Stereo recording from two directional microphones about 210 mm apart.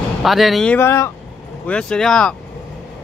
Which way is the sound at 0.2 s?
Centre (ahead or behind).